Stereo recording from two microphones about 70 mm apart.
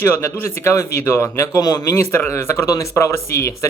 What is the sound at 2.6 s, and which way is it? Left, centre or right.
Speech, left.